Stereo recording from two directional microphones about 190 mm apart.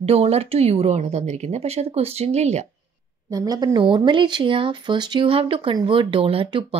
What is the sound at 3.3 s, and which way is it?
Speech, 20° right (ahead or behind).